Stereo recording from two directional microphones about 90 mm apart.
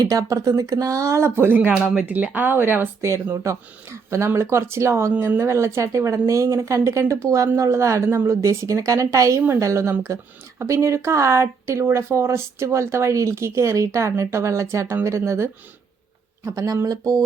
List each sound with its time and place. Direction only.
0.0 s speech: 40° right (ahead or behind)
16.6 s speech: 40° right (ahead or behind)